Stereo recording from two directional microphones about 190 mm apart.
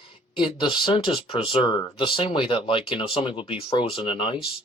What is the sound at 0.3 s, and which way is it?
Speech, 25° left (ahead or behind).